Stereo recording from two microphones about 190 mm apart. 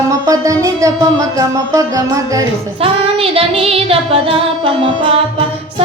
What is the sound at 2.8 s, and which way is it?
Child singing, 30° right (ahead or behind).